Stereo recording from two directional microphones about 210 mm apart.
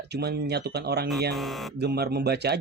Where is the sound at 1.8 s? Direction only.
50° right (ahead or behind).